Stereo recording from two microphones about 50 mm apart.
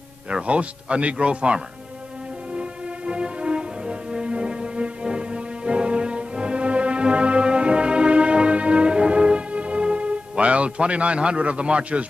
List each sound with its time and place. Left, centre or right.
0.3 s speech: right
3.1 s music: centre